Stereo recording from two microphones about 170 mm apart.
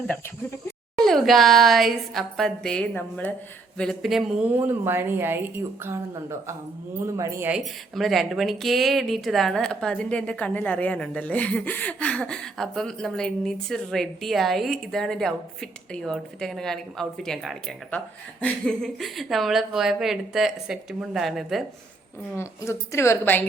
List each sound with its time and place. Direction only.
0.9 s speech: centre (ahead or behind)
7.0 s speech: 20° right (ahead or behind)
7.5 s speech: centre (ahead or behind)
22.4 s a woman's voice: 15° left (ahead or behind)